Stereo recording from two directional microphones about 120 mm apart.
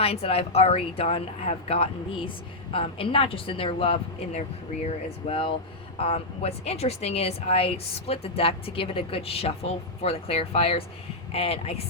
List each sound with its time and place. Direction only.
0.0 s speech: 55° left (ahead or behind)